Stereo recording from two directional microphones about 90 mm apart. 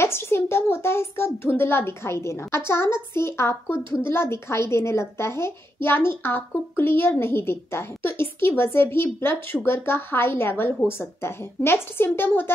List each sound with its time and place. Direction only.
0.0 s a child's voice: 30° left (ahead or behind)